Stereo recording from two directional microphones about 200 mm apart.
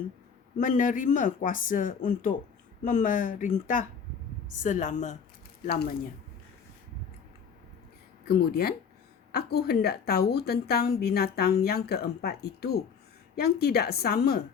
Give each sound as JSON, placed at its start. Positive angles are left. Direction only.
{"t": 0.6, "sound": "speech", "side_deg": 40}
{"t": 8.3, "sound": "a woman's voice", "side_deg": 50}